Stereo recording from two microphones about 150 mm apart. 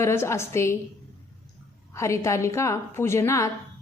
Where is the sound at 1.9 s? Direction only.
20° left (ahead or behind).